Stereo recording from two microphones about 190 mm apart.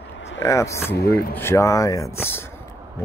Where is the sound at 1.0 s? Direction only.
55° left (ahead or behind).